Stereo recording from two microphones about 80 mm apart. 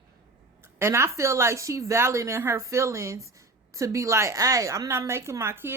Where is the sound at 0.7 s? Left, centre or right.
Right.